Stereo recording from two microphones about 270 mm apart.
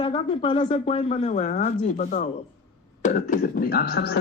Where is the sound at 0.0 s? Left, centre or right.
Centre.